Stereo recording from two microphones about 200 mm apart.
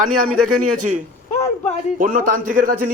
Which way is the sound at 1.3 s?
30° left (ahead or behind).